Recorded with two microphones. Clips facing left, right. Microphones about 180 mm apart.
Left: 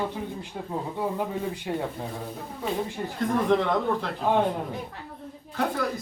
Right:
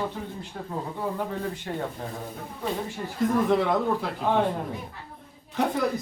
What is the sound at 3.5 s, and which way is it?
Speech, 5° right (ahead or behind).